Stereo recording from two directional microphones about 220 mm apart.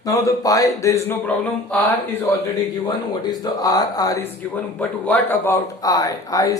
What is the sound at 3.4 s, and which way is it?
A man's voice, 15° left (ahead or behind).